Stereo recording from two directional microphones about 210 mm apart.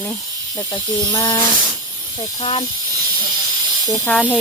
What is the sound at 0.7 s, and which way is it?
Speech, 15° left (ahead or behind).